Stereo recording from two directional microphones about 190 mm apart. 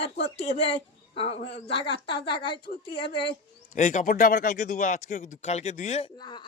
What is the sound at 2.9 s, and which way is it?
Speech, 25° left (ahead or behind).